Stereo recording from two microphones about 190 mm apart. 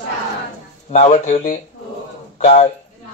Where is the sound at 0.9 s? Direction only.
35° left (ahead or behind).